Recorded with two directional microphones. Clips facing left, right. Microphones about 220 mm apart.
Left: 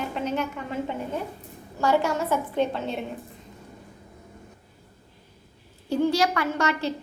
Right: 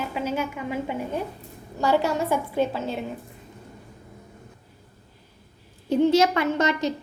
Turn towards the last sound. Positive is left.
turn(degrees=-20)  # may be behind; listen again after turning